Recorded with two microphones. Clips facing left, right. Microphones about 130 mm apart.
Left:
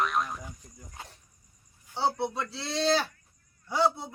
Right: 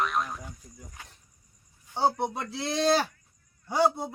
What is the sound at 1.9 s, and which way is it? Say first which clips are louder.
A man's voice: right 2 dB; 45° right (ahead or behind).